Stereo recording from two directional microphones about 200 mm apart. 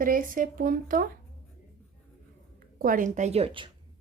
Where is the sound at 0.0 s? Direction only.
45° right (ahead or behind).